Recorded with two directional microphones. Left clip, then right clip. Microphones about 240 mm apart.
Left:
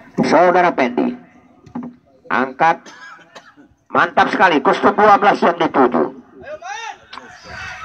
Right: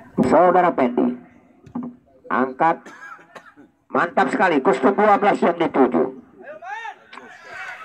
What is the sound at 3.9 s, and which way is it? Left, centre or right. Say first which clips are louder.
Speech: left 5 dB; right.